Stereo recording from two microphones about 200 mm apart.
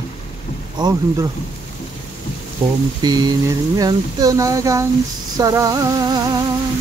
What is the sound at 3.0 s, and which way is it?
Speech, 20° right (ahead or behind).